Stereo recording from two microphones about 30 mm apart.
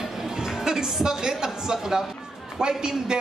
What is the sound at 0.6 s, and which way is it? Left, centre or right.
Speech, centre.